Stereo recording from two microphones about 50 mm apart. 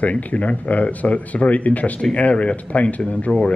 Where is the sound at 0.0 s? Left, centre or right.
Left.